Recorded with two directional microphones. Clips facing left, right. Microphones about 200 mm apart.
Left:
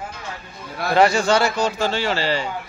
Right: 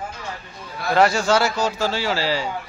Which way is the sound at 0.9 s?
Centre (ahead or behind).